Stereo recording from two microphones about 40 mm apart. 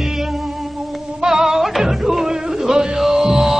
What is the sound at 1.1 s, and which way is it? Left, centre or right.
Music, centre.